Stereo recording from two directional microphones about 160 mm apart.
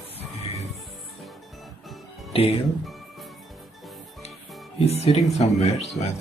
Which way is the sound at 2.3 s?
40° left (ahead or behind).